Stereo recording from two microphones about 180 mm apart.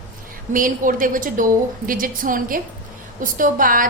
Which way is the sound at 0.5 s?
50° right (ahead or behind).